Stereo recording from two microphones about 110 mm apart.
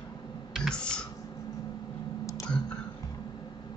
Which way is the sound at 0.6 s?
10° left (ahead or behind).